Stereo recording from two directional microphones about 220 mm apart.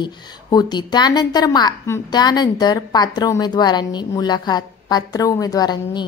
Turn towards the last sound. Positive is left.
turn(degrees=20)  # may be behind; listen again after turning